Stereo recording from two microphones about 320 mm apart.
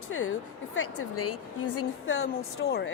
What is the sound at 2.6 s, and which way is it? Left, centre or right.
Speech, left.